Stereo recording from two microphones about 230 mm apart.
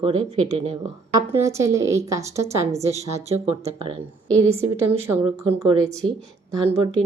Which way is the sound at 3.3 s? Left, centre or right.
Right.